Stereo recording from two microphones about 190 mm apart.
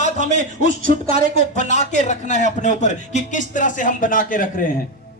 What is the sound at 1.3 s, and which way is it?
A man's voice, 35° left (ahead or behind).